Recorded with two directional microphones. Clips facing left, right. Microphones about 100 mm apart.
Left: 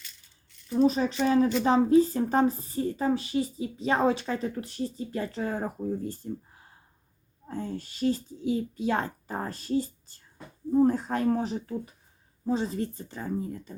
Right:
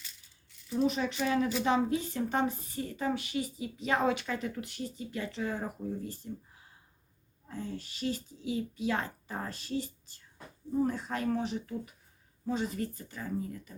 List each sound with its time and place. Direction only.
0.7 s a woman's voice: 35° left (ahead or behind)